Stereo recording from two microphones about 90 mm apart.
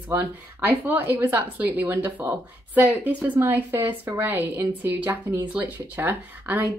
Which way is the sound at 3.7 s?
30° right (ahead or behind).